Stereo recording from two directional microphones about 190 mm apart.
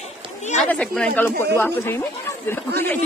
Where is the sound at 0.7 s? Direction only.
5° left (ahead or behind).